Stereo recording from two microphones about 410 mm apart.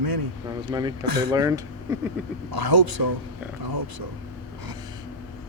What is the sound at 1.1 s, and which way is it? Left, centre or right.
Speech, right.